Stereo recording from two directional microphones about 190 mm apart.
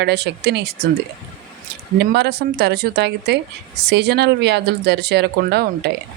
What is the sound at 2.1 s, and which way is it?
Speech, 60° right (ahead or behind).